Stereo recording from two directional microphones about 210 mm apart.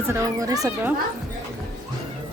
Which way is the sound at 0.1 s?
15° right (ahead or behind).